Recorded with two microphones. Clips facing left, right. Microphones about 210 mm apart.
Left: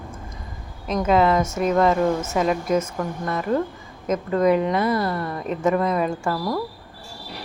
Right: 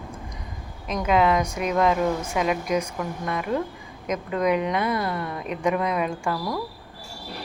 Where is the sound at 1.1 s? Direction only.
Centre (ahead or behind).